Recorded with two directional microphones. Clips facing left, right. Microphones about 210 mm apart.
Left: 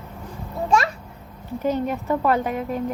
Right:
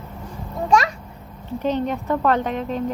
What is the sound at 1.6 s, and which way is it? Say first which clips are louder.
Speech: right 1 dB; 10° left (ahead or behind).